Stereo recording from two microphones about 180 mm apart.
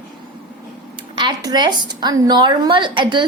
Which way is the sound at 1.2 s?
25° right (ahead or behind).